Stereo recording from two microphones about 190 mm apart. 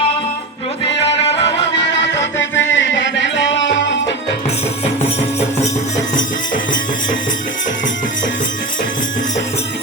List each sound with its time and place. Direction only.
1.7 s music: 70° left (ahead or behind)